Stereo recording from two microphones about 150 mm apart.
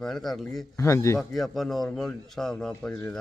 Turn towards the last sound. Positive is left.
turn(degrees=5)  # may be behind; listen again after turning